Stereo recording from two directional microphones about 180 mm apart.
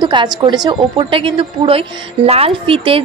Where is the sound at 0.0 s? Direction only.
25° right (ahead or behind).